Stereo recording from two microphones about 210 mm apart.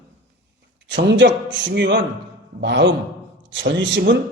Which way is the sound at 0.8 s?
60° right (ahead or behind).